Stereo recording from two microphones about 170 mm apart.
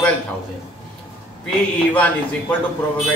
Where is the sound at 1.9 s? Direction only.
10° left (ahead or behind).